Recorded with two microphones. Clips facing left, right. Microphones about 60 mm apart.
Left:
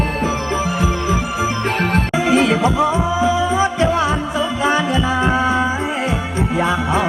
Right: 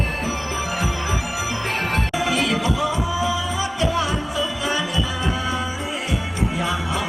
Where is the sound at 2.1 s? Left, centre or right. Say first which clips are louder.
Left 8 dB; left.